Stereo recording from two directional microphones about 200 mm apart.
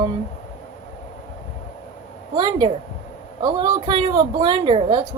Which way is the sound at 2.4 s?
20° right (ahead or behind).